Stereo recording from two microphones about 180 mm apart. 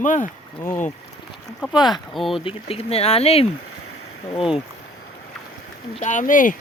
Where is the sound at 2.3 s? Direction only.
30° left (ahead or behind).